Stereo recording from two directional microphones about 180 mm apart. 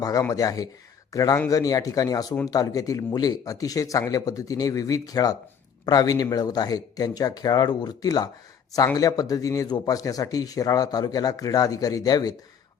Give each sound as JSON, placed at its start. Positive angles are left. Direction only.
{"t": 0.0, "sound": "speech", "side_deg": 20}